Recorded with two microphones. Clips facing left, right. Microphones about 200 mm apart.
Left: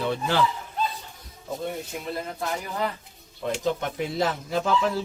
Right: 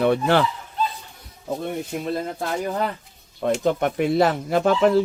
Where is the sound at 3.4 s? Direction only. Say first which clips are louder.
Right 6 dB; 55° right (ahead or behind).